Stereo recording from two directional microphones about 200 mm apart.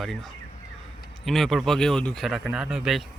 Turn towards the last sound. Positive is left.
turn(degrees=0)  # may be behind; listen again after turning